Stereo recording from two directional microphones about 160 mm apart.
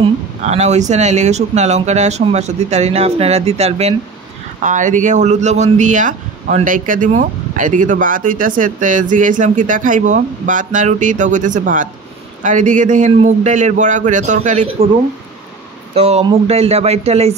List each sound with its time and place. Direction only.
0.4 s speech: 45° right (ahead or behind)
16.0 s speech: 40° right (ahead or behind)